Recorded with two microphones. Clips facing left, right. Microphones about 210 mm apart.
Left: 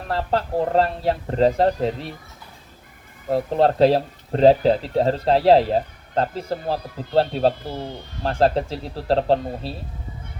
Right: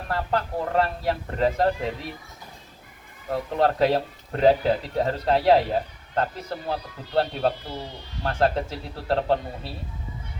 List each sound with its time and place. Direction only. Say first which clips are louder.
0.1 s speech: left 4 dB; 30° left (ahead or behind)
3.2 s speech: left 4 dB; 35° left (ahead or behind)